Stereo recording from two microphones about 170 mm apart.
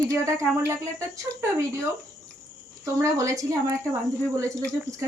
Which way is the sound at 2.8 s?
20° right (ahead or behind).